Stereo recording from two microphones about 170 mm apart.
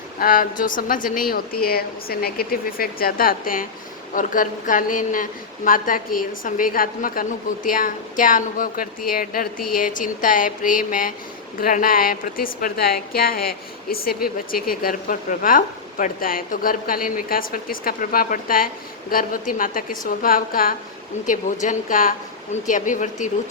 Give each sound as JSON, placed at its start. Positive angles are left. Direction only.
{"t": 0.2, "sound": "a woman's voice", "side_deg": 55}